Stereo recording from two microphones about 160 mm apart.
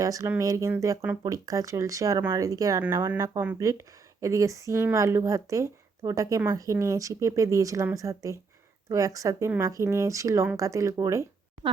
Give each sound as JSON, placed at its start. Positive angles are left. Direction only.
{"t": 0.0, "sound": "speech", "side_deg": -20}